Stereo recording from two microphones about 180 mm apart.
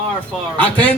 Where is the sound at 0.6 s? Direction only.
10° left (ahead or behind).